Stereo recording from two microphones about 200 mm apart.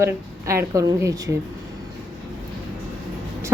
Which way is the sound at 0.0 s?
15° right (ahead or behind).